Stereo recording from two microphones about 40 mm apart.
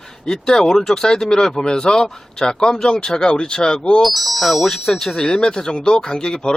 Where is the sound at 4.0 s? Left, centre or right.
Centre.